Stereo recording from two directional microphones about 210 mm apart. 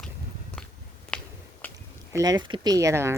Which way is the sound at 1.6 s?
10° left (ahead or behind).